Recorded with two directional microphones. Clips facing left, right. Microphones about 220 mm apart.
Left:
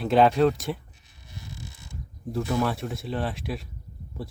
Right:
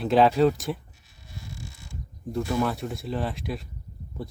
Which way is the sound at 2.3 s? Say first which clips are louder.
Even; centre (ahead or behind).